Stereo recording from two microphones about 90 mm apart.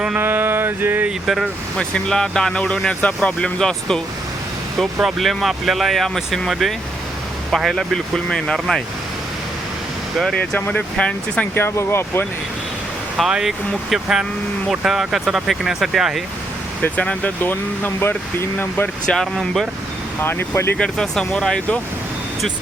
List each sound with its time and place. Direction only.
0.2 s a sound: 20° right (ahead or behind)
1.8 s speech: 10° left (ahead or behind)
10.3 s speech: 15° left (ahead or behind)
11.5 s speech: 25° left (ahead or behind)
13.1 s speech: 5° right (ahead or behind)
16.8 s speech: 15° left (ahead or behind)
19.0 s speech: 5° left (ahead or behind)
20.2 s speech: 25° left (ahead or behind)
20.7 s speech: 10° left (ahead or behind)